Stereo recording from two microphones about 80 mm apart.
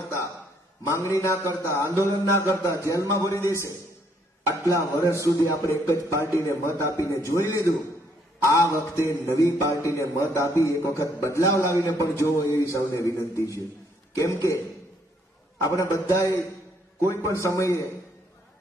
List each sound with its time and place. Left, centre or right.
0.0 s a sound: left
0.8 s a man's voice: left
4.6 s a man's voice: left
15.6 s a man's voice: left